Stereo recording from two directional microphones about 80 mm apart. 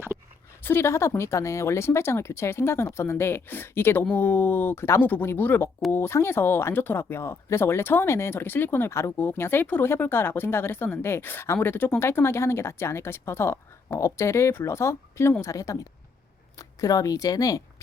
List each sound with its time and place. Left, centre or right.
0.6 s a woman's voice: left